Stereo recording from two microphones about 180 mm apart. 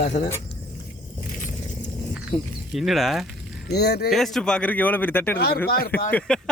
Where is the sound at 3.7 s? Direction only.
65° left (ahead or behind).